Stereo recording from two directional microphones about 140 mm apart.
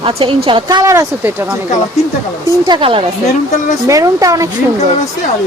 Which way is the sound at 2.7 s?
40° right (ahead or behind).